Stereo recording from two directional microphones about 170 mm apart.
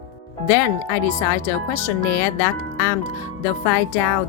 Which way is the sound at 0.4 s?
15° left (ahead or behind).